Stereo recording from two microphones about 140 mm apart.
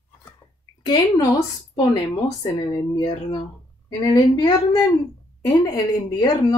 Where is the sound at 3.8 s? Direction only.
25° left (ahead or behind).